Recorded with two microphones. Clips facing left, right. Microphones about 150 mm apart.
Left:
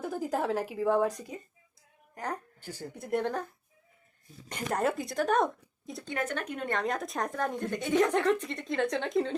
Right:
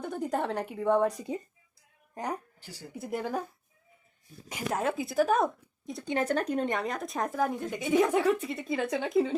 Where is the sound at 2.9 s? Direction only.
Centre (ahead or behind).